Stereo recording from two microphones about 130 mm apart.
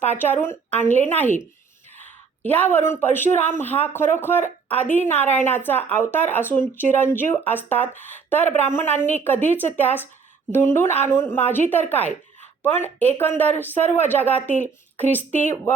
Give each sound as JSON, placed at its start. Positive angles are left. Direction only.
{"t": 0.1, "sound": "speech", "side_deg": 15}